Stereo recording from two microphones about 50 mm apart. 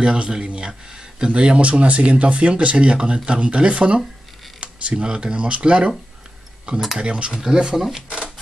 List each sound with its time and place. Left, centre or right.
0.0 s speech: centre
7.0 s speech: right